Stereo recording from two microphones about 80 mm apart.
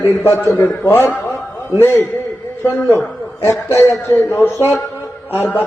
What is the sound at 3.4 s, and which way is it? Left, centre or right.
Speech, left.